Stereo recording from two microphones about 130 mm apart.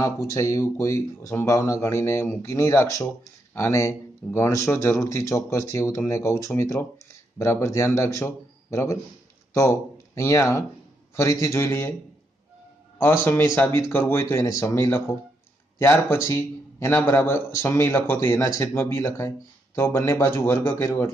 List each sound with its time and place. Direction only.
0.0 s speech: 25° left (ahead or behind)
13.0 s speech: 20° left (ahead or behind)